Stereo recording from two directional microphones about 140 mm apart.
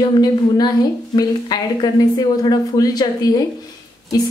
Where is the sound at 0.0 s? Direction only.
30° left (ahead or behind).